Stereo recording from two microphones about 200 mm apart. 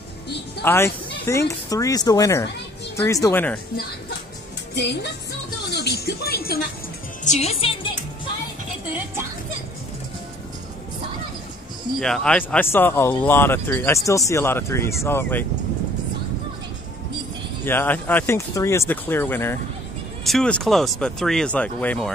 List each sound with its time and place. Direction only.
0.7 s speech: 10° left (ahead or behind)
4.7 s speech: 60° left (ahead or behind)
5.7 s music: 55° left (ahead or behind)
7.2 s a woman's voice: 30° left (ahead or behind)
12.0 s speech: 5° left (ahead or behind)
17.6 s speech: 10° left (ahead or behind)